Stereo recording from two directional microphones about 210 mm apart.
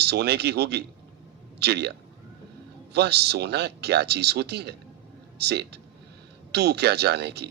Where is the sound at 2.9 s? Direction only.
50° right (ahead or behind).